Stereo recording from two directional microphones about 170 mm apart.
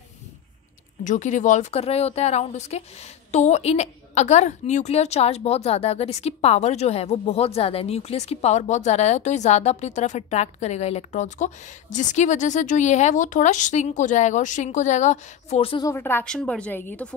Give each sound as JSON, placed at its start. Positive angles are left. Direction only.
{"t": 1.0, "sound": "a woman's voice", "side_deg": 50}
{"t": 15.8, "sound": "a woman's voice", "side_deg": 15}